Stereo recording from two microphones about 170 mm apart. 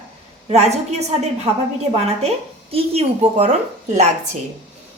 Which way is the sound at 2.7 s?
35° right (ahead or behind).